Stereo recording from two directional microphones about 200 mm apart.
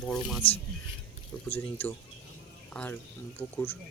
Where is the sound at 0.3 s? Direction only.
30° left (ahead or behind).